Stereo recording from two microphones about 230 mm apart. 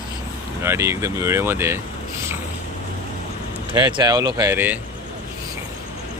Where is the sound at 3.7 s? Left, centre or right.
Centre.